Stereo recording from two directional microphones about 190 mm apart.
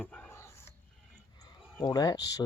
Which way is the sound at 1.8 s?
20° left (ahead or behind).